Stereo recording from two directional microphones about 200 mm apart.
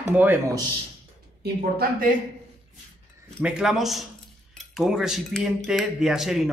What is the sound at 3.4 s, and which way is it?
Speech, 5° right (ahead or behind).